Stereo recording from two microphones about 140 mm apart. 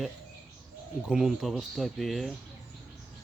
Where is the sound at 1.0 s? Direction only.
5° right (ahead or behind).